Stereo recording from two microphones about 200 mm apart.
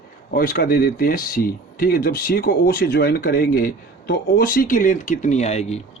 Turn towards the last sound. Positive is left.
turn(degrees=35)  # may be behind; listen again after turning